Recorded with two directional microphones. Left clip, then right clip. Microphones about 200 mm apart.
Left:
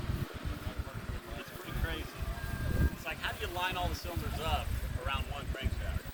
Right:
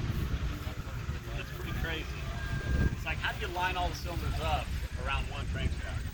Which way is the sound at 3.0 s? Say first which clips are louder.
Right 4 dB; 50° left (ahead or behind).